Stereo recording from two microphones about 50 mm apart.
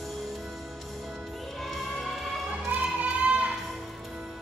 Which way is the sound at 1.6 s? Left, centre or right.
Centre.